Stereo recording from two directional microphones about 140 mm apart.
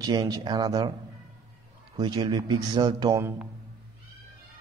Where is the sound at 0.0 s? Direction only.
30° right (ahead or behind).